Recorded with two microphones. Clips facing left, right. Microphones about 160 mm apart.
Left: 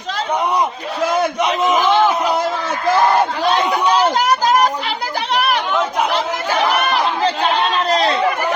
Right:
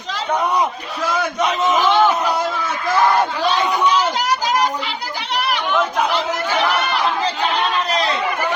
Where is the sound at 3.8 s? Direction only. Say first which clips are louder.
Left 3 dB; 40° left (ahead or behind).